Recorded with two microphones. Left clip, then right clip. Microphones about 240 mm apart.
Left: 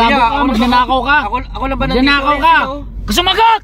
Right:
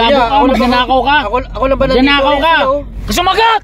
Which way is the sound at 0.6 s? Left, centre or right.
Left.